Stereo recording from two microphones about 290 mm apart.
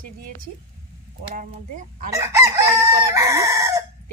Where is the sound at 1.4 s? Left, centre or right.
Right.